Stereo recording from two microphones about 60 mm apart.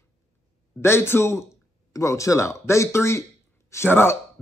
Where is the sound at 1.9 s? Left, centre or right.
Left.